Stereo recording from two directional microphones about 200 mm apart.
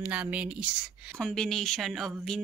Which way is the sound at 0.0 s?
5° right (ahead or behind).